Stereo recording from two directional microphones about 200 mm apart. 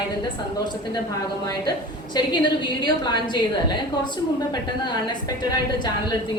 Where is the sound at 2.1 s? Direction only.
25° left (ahead or behind).